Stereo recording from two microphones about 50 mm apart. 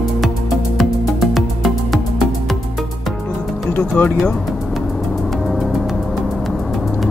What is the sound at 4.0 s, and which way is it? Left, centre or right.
Speech, left.